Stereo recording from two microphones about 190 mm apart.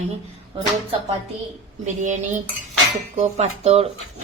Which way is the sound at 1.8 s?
40° right (ahead or behind).